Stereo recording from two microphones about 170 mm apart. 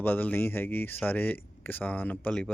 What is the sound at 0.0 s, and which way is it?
Speech, 10° left (ahead or behind).